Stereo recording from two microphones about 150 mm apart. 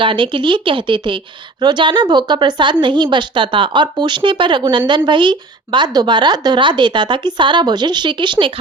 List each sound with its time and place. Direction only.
0.0 s speech: 35° right (ahead or behind)